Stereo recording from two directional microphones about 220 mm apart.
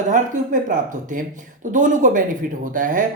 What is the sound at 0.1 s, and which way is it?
Speech, 35° right (ahead or behind).